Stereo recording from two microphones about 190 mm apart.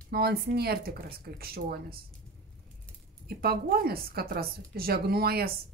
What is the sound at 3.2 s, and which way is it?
Speech, 55° right (ahead or behind).